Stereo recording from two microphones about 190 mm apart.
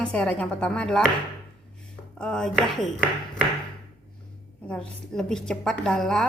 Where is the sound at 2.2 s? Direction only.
5° left (ahead or behind).